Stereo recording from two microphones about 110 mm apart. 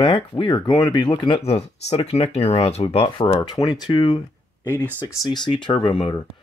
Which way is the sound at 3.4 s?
35° left (ahead or behind).